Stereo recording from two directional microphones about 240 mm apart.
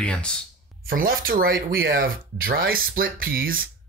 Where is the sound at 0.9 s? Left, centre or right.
Right.